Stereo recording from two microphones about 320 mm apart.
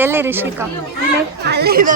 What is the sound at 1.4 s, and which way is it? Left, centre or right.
Speech, right.